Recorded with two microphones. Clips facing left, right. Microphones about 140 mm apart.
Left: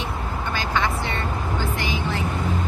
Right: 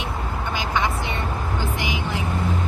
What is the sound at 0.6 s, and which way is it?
Vehicle, 15° right (ahead or behind).